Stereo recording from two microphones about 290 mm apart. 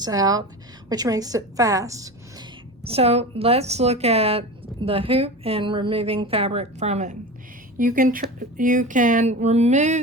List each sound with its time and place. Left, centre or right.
0.0 s a woman's voice: centre